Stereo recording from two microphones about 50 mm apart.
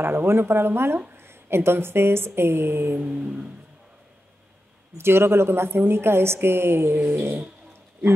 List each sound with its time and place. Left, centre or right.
0.0 s a woman's voice: right
3.1 s a sound: centre
4.9 s a woman's voice: right